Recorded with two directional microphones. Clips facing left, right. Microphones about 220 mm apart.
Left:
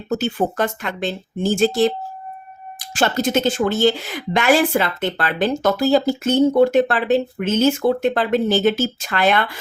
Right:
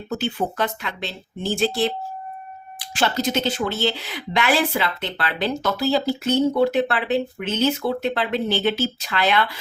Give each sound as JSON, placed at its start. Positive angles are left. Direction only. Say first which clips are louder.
{"t": 0.1, "sound": "speech", "louder": "left 5 dB", "side_deg": 45}